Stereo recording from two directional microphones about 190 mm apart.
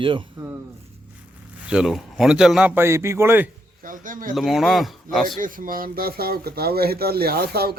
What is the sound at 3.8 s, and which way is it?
Speech, 45° right (ahead or behind).